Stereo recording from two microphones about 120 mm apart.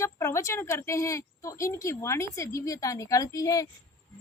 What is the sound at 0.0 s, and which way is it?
A woman's voice, 20° left (ahead or behind).